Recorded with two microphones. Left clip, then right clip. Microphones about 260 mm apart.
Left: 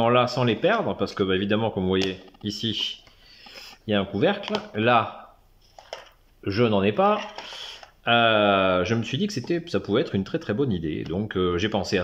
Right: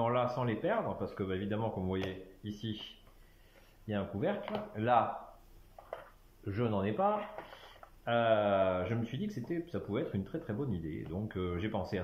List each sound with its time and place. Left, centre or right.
0.0 s speech: left
6.4 s speech: left